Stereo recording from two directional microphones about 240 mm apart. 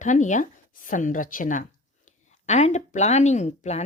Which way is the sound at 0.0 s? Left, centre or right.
Left.